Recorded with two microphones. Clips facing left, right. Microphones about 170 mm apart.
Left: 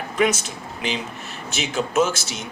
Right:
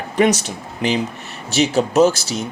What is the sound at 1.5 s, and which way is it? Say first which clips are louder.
Speech: right 7 dB; 35° right (ahead or behind).